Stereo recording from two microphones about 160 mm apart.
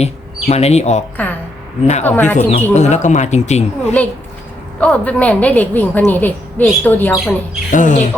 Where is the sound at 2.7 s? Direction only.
45° left (ahead or behind).